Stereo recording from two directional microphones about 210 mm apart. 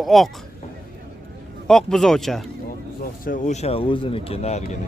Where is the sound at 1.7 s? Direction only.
Centre (ahead or behind).